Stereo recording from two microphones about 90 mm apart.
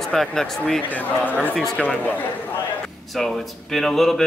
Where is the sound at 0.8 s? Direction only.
20° left (ahead or behind).